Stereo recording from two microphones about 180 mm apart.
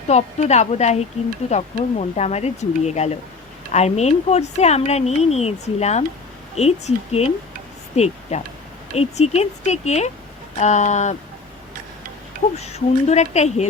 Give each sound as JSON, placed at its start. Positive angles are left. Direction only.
{"t": 0.1, "sound": "speech", "side_deg": 40}
{"t": 12.5, "sound": "speech", "side_deg": 35}